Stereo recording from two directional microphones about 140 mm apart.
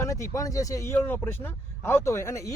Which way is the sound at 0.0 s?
20° left (ahead or behind).